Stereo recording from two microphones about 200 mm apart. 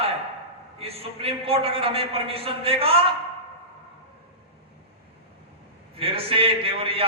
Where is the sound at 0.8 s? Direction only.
30° right (ahead or behind).